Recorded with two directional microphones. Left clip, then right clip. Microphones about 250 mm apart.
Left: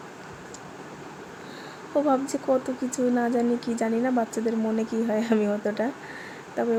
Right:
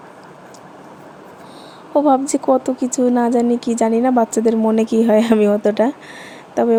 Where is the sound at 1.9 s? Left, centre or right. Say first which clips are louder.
Right 9 dB; right.